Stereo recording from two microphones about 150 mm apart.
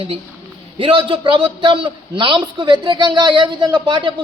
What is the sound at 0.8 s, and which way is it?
Speech, 35° right (ahead or behind).